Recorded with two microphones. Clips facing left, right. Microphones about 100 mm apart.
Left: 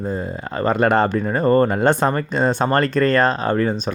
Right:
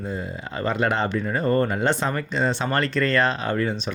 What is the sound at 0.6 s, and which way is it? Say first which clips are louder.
Speech: left 7 dB; 50° left (ahead or behind).